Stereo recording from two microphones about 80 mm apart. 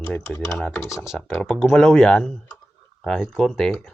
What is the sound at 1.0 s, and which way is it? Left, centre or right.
Speech, centre.